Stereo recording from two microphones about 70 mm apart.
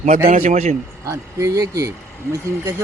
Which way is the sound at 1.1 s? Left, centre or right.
Right.